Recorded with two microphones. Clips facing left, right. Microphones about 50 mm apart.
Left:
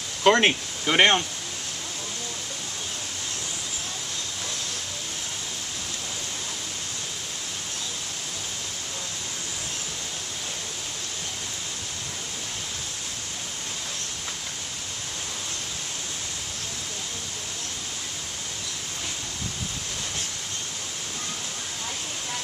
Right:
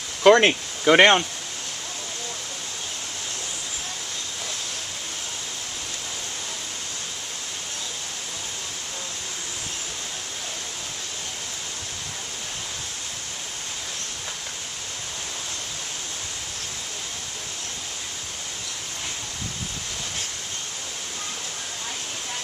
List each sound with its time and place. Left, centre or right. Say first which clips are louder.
0.2 s speech: right 4 dB; right